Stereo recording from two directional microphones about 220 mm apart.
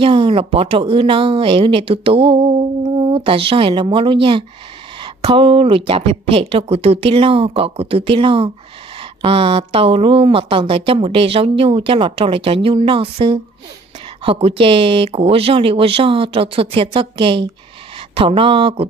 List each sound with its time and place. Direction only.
0.0 s speech: 25° right (ahead or behind)